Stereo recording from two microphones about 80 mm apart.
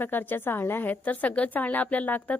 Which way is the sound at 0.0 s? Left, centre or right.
Left.